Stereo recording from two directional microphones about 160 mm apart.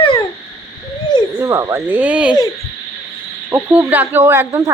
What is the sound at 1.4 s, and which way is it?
Speech, 20° right (ahead or behind).